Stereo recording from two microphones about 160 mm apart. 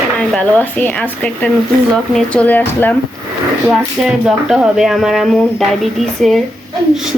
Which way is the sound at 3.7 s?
5° right (ahead or behind).